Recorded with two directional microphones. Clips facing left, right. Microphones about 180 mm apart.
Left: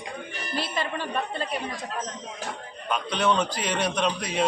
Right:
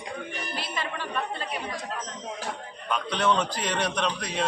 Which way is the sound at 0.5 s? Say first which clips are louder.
Left 6 dB; 35° left (ahead or behind).